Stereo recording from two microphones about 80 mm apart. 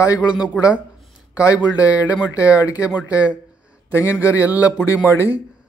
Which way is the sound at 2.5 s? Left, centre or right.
Left.